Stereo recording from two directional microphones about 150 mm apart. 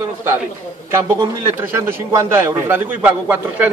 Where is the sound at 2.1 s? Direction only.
20° right (ahead or behind).